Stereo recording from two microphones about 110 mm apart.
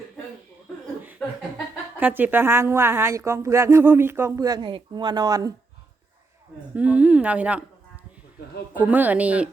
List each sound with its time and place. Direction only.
2.0 s a woman's voice: 15° right (ahead or behind)
4.4 s speech: 35° right (ahead or behind)
6.7 s speech: 15° right (ahead or behind)
8.8 s speech: 15° right (ahead or behind)